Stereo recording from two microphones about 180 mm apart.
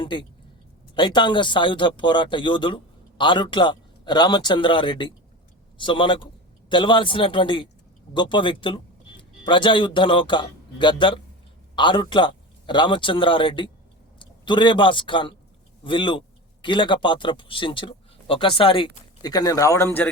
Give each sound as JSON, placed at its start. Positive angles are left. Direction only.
{"t": 0.0, "sound": "a man's voice", "side_deg": 25}